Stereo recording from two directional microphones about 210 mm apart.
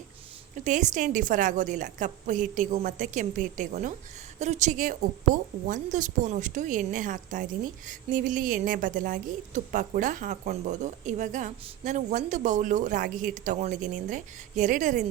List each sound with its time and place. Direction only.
0.5 s a woman's voice: 35° right (ahead or behind)